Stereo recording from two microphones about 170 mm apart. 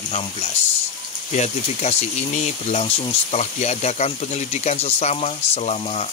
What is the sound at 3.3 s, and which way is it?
Speech, 40° left (ahead or behind).